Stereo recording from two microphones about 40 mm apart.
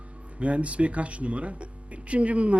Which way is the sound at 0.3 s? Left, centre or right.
Right.